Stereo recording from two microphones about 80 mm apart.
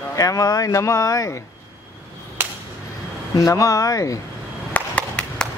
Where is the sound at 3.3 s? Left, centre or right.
Left.